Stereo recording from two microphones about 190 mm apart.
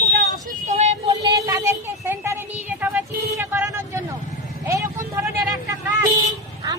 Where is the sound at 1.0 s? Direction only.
20° right (ahead or behind).